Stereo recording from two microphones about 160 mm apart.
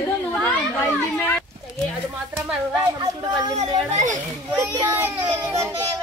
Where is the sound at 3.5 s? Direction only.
50° right (ahead or behind).